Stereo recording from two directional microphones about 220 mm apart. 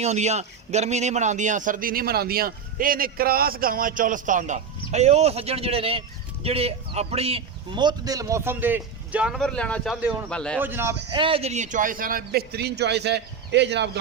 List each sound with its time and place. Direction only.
0.0 s a man's voice: 30° right (ahead or behind); by 10.6 s 5° left (ahead or behind)
10.6 s speech: 10° right (ahead or behind); by 14.0 s 50° right (ahead or behind)